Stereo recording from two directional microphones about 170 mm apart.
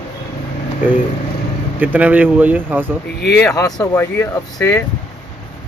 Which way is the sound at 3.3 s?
20° left (ahead or behind).